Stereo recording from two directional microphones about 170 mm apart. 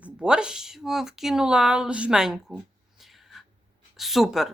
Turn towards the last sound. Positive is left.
turn(degrees=0)  # may be behind; listen again after turning